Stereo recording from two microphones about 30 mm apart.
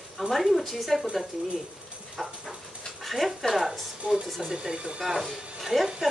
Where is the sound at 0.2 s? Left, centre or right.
Centre.